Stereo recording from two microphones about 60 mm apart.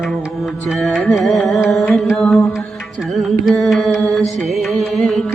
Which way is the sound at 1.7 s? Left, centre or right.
Centre.